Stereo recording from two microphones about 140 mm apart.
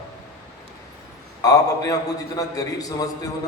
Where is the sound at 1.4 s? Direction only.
25° left (ahead or behind).